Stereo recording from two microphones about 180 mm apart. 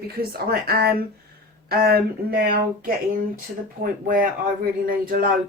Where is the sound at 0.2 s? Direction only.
60° right (ahead or behind).